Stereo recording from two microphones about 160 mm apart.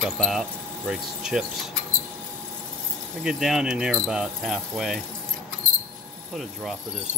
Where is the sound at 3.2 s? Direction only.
5° right (ahead or behind).